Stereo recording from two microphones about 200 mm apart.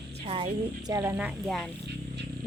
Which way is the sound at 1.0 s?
10° right (ahead or behind).